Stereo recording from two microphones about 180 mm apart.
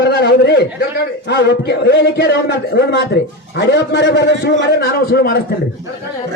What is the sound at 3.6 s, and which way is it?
A man's voice, 75° left (ahead or behind).